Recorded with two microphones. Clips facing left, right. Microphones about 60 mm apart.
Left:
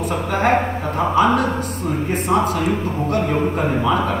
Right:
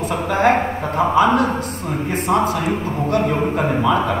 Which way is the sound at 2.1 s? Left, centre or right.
Right.